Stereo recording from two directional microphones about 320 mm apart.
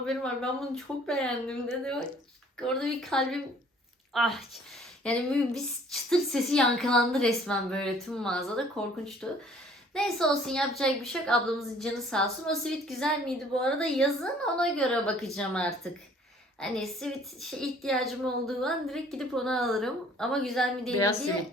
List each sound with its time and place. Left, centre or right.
0.0 s a woman's voice: centre